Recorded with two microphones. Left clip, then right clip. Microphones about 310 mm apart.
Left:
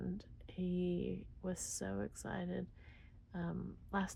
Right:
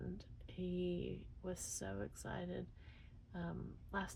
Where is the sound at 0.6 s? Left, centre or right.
Left.